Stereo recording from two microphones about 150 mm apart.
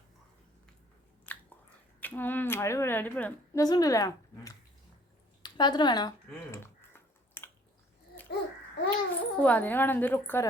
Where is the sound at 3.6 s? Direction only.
25° left (ahead or behind).